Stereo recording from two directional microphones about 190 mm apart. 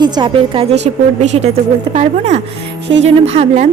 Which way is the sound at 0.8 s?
35° right (ahead or behind).